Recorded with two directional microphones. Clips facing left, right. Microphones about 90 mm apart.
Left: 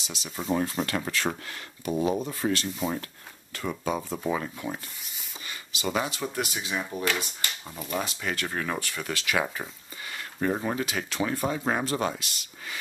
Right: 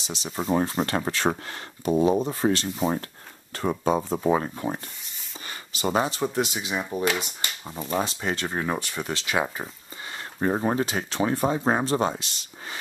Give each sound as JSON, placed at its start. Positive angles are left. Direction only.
{"t": 0.6, "sound": "speech", "side_deg": -35}